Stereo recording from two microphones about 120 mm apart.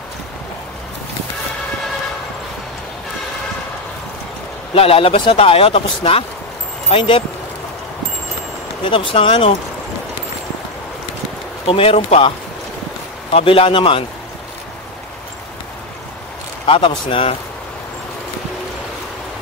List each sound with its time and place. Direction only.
4.7 s speech: 55° left (ahead or behind)
8.8 s speech: 45° left (ahead or behind)
11.6 s speech: 50° left (ahead or behind)
13.3 s speech: 50° left (ahead or behind)
16.6 s speech: 50° left (ahead or behind)